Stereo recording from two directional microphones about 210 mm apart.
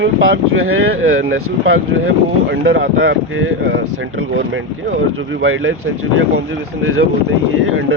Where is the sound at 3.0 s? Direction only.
65° right (ahead or behind).